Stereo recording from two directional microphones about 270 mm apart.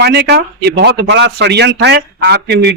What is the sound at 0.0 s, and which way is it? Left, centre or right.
A man's voice, right.